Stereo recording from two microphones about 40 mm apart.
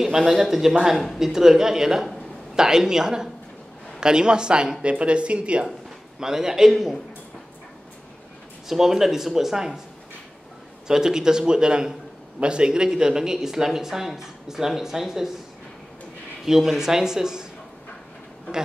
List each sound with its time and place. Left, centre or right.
0.0 s speech: centre
0.9 s speech: centre
1.2 s speech: centre; by 5.7 s right
6.1 s speech: centre
8.6 s speech: centre
10.9 s speech: centre
16.4 s speech: centre